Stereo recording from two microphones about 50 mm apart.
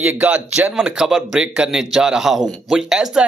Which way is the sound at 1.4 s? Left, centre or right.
Right.